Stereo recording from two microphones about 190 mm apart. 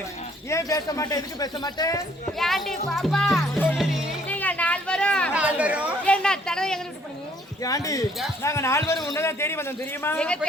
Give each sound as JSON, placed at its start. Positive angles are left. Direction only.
{"t": 0.5, "sound": "a man's voice", "side_deg": 20}
{"t": 2.4, "sound": "speech", "side_deg": 0}
{"t": 3.5, "sound": "music", "side_deg": 5}
{"t": 4.3, "sound": "a sound", "side_deg": 10}
{"t": 5.3, "sound": "chatter", "side_deg": -5}
{"t": 6.1, "sound": "chatter", "side_deg": 5}
{"t": 7.6, "sound": "a man's voice", "side_deg": 20}